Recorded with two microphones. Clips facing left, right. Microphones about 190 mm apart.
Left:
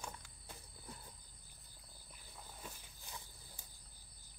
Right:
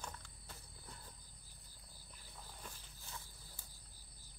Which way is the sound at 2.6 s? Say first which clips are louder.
Left 3 dB; 5° left (ahead or behind).